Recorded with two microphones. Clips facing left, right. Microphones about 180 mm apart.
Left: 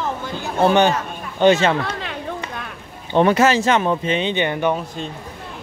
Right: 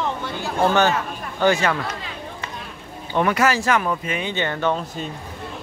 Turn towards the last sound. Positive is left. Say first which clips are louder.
# left 3 dB
turn(degrees=15)  # may be behind; listen again after turning